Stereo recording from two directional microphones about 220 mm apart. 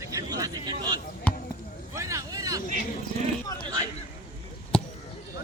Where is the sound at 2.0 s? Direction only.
15° right (ahead or behind).